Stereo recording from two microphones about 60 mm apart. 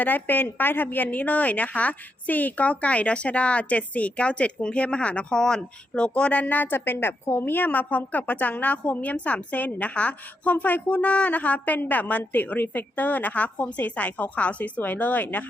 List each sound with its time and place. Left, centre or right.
0.0 s a woman's voice: left